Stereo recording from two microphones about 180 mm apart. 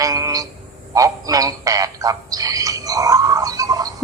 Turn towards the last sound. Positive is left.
turn(degrees=-20)  # may be behind; listen again after turning